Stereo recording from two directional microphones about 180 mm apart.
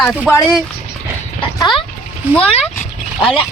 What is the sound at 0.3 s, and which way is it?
Speech, 20° left (ahead or behind).